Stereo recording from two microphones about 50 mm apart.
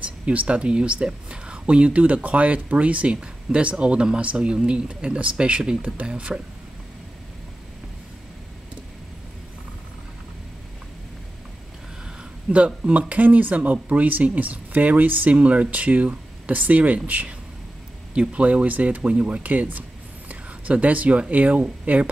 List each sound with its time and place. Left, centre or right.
0.0 s speech: right
12.4 s speech: right
19.4 s speech: right